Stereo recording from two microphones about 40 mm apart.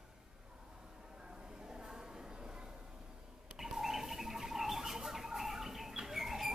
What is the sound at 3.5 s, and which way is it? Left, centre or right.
Bird, centre.